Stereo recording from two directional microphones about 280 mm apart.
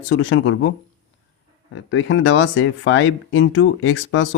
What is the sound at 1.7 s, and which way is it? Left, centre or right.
Speech, left.